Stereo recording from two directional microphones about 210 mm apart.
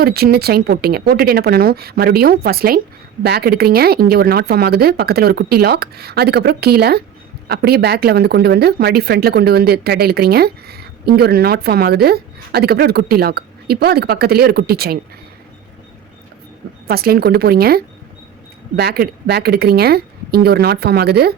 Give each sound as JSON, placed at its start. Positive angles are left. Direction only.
{"t": 0.0, "sound": "speech", "side_deg": -45}
{"t": 16.8, "sound": "speech", "side_deg": -45}